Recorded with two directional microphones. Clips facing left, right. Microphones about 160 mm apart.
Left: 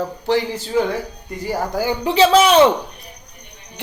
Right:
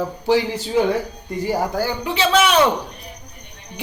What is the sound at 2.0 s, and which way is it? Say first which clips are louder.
Speech: left 6 dB; 30° left (ahead or behind).